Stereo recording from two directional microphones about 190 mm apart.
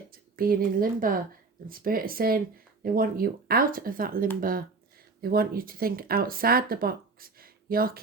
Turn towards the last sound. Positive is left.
turn(degrees=-50)  # may be behind; listen again after turning